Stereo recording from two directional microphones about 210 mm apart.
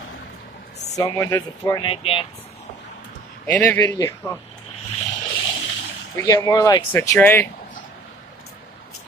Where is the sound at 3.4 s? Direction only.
10° left (ahead or behind).